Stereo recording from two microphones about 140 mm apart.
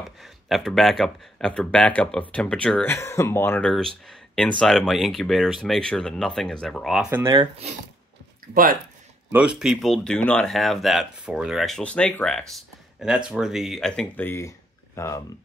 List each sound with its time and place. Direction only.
0.0 s speech: centre (ahead or behind)
3.7 s speech: centre (ahead or behind)
7.1 s speech: 15° right (ahead or behind)
9.3 s speech: 5° right (ahead or behind); by 15.2 s 20° left (ahead or behind)